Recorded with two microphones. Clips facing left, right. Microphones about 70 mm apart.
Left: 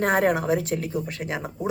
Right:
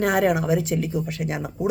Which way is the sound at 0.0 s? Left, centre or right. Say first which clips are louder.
Right 1 dB; left.